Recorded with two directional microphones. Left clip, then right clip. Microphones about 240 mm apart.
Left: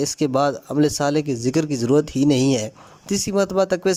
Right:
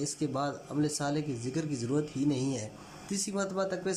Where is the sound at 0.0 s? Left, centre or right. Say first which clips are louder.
Left 14 dB; left.